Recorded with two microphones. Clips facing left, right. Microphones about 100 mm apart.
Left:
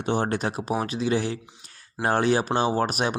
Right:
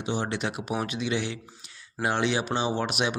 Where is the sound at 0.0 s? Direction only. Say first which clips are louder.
Left 4 dB; 50° left (ahead or behind).